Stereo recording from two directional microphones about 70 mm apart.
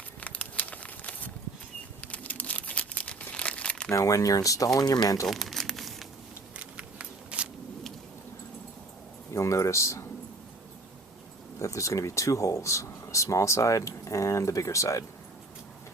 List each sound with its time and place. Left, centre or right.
0.2 s a sound: left
2.0 s crumpling: left
3.9 s speech: left
5.2 s crumpling: centre
6.6 s a sound: centre
9.3 s speech: left
11.6 s speech: left